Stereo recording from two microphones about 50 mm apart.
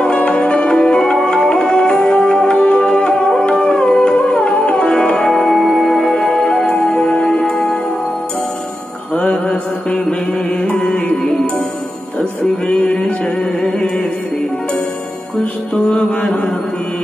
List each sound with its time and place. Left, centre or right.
0.0 s music: left
9.1 s mantra: centre
10.6 s music: centre
12.6 s music: left
13.2 s music: centre
15.7 s music: centre